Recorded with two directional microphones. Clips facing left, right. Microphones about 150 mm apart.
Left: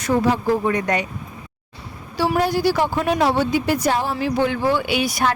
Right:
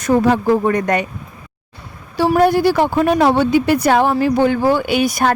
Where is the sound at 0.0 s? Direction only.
50° right (ahead or behind).